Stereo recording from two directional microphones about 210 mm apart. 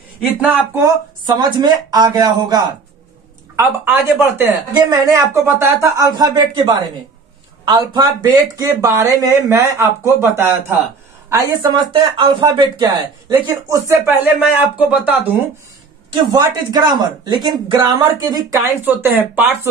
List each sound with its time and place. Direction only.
0.4 s a woman's voice: 10° right (ahead or behind)
16.1 s speech: 20° right (ahead or behind)